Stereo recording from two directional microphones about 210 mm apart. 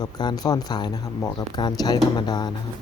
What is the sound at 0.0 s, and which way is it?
Speech, 20° left (ahead or behind).